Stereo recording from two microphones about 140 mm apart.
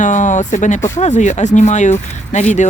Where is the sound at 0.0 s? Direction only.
60° left (ahead or behind).